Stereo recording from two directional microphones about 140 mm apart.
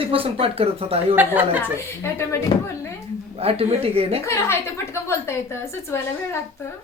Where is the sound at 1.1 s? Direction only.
15° right (ahead or behind).